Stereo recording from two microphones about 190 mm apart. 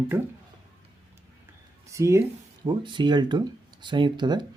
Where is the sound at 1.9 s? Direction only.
15° right (ahead or behind).